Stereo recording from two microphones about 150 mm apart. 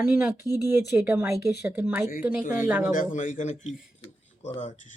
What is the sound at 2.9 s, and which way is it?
A man's voice, 60° left (ahead or behind).